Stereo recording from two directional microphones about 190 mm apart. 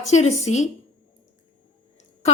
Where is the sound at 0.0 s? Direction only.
35° left (ahead or behind).